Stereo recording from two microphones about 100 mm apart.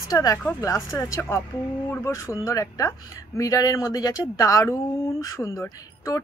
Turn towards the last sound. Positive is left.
turn(degrees=30)  # may be behind; listen again after turning